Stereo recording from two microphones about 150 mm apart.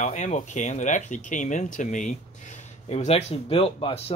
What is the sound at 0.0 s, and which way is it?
Speech, 50° left (ahead or behind).